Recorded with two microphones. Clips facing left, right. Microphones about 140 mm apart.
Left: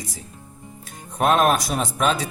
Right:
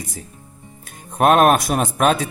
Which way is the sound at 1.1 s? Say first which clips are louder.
Right 5 dB; 55° right (ahead or behind).